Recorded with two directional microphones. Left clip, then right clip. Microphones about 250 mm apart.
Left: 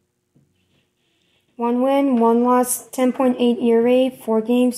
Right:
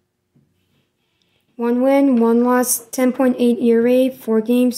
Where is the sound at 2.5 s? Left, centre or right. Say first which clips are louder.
Even; right.